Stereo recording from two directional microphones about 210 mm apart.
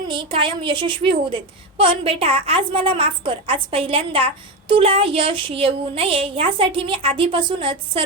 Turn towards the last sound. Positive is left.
turn(degrees=-25)  # may be behind; listen again after turning